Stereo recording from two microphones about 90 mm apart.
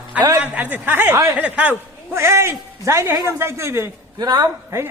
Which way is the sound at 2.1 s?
30° right (ahead or behind).